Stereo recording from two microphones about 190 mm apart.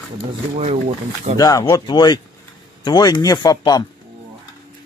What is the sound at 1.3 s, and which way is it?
Speech, 20° left (ahead or behind).